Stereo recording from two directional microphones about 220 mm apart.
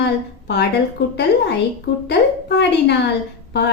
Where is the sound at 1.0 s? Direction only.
45° left (ahead or behind).